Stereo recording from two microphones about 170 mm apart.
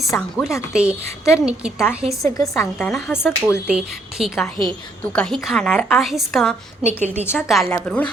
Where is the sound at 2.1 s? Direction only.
20° left (ahead or behind).